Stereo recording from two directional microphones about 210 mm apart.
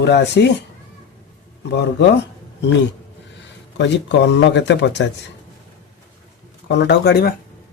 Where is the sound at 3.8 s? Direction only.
55° left (ahead or behind).